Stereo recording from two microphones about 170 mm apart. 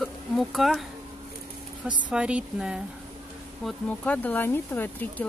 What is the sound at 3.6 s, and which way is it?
Speech, 10° left (ahead or behind).